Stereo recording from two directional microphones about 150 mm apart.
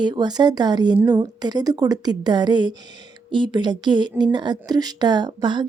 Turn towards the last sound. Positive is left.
turn(degrees=-30)  # may be behind; listen again after turning